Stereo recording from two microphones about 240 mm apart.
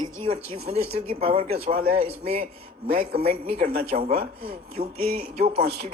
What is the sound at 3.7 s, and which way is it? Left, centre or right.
A man's voice, right.